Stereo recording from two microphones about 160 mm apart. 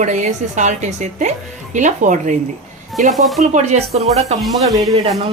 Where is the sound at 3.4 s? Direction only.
45° right (ahead or behind).